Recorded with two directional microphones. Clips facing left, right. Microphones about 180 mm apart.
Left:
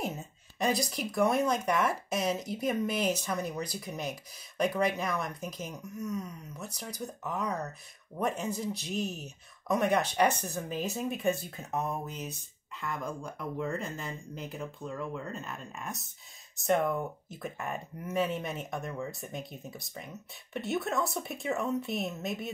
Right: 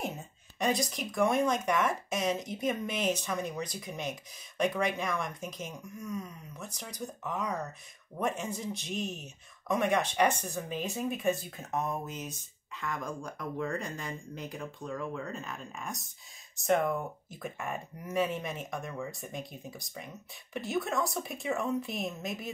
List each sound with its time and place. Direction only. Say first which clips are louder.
0.6 s speech: even; centre (ahead or behind)